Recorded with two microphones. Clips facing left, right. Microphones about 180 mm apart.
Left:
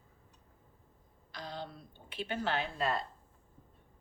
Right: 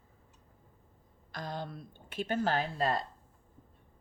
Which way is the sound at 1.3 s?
50° right (ahead or behind).